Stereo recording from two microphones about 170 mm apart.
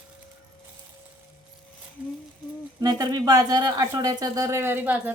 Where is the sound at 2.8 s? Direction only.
20° right (ahead or behind).